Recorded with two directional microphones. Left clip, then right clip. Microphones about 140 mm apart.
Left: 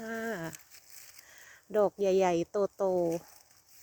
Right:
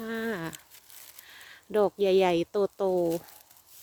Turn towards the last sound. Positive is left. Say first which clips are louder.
# right 3 dB
turn(degrees=-20)  # may be behind; listen again after turning